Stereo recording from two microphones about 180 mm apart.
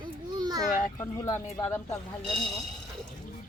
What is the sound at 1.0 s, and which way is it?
Speech, 15° left (ahead or behind).